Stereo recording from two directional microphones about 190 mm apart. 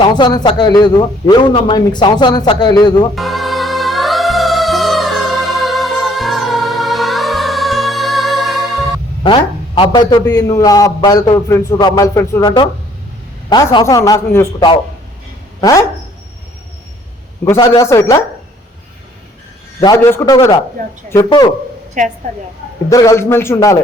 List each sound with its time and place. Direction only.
0.0 s a man's voice: 20° left (ahead or behind)
3.2 s music: centre (ahead or behind)
9.2 s a man's voice: 25° left (ahead or behind)
17.4 s a man's voice: 15° left (ahead or behind)
19.8 s a man's voice: 15° left (ahead or behind)
22.0 s a woman's voice: 40° right (ahead or behind)
22.9 s a man's voice: 15° left (ahead or behind)